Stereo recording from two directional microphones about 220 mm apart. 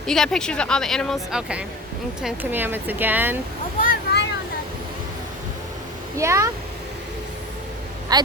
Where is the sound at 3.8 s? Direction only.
45° left (ahead or behind).